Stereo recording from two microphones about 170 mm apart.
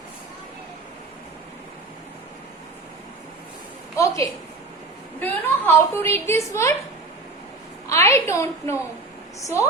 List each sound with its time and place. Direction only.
3.9 s a woman's voice: 20° left (ahead or behind)
7.9 s a woman's voice: 15° left (ahead or behind)